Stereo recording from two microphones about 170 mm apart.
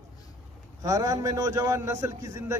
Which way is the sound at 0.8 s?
20° right (ahead or behind).